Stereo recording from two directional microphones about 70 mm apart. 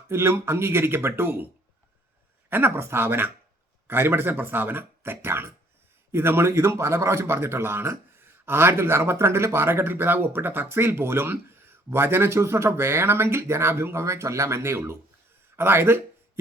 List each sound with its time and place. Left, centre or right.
0.1 s speech: right
2.5 s speech: right